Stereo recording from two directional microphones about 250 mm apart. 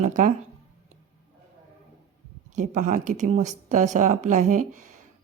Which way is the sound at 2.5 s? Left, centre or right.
Right.